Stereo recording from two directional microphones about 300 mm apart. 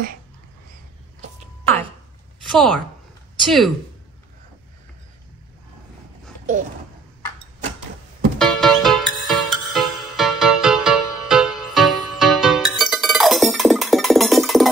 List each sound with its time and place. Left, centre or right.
1.2 s a sound: centre
2.5 s speech: centre
8.4 s music: centre